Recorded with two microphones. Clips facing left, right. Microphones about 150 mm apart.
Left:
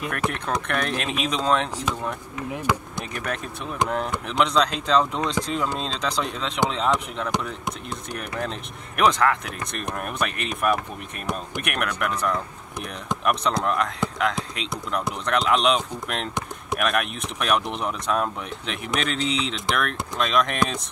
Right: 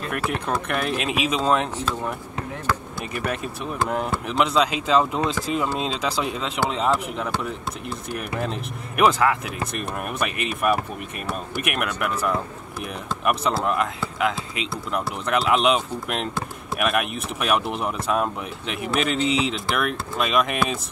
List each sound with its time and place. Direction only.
0.3 s speech: 5° right (ahead or behind)
2.5 s speech: 15° left (ahead or behind)
3.0 s speech: 5° right (ahead or behind)